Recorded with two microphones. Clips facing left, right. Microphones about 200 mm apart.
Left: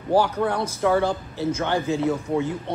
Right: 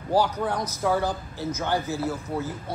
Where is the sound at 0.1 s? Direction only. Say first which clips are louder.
Left 3 dB; 10° right (ahead or behind).